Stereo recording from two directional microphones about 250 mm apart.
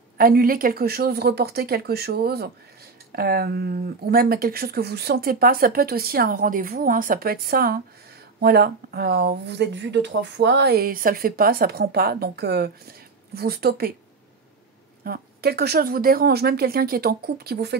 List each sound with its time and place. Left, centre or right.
0.2 s speech: right
15.0 s speech: right